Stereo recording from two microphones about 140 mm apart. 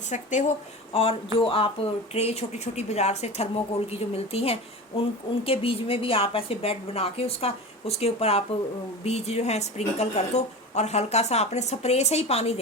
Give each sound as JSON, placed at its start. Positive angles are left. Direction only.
{"t": 0.1, "sound": "speech", "side_deg": 60}
{"t": 0.9, "sound": "speech", "side_deg": 40}